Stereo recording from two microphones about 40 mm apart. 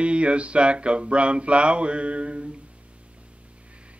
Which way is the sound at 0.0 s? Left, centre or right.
Right.